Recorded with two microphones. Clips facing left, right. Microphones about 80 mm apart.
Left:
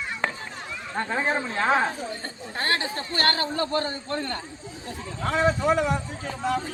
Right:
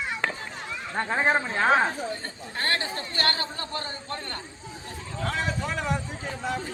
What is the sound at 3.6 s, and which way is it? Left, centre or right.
Speech, left.